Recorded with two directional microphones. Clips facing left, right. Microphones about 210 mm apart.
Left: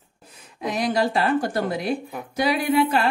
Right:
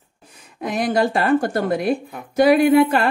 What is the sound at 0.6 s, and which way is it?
Speech, 50° right (ahead or behind).